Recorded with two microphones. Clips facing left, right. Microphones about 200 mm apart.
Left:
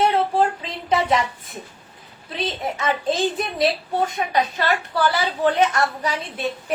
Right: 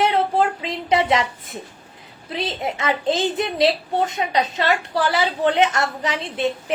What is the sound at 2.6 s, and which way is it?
A woman's voice, 25° right (ahead or behind).